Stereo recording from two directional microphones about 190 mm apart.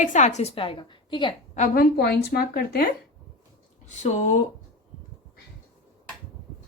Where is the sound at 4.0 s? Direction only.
40° left (ahead or behind).